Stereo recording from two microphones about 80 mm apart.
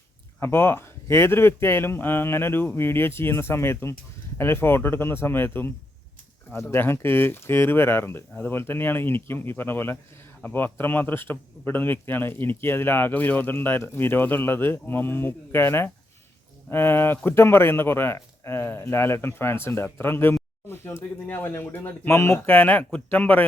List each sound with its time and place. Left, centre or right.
0.3 s speech: left
6.5 s speech: left